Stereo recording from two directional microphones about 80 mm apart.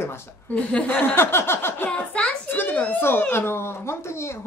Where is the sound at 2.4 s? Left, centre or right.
Left.